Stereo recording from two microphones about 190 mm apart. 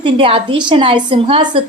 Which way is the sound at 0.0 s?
25° right (ahead or behind).